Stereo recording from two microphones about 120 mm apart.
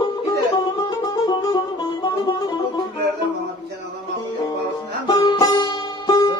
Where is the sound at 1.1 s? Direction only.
30° left (ahead or behind).